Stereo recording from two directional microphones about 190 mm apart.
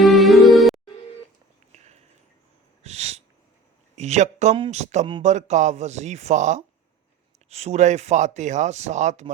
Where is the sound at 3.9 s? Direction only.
35° right (ahead or behind).